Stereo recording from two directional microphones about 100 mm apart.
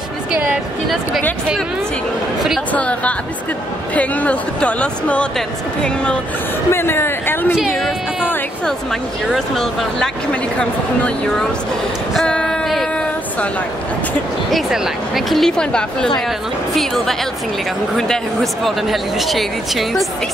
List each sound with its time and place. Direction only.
2.7 s speech: 15° left (ahead or behind)
6.7 s a man's voice: 25° left (ahead or behind)
7.5 s speech: 5° right (ahead or behind)
9.3 s speech: centre (ahead or behind)
12.1 s a sound: 5° left (ahead or behind)
14.5 s speech: centre (ahead or behind)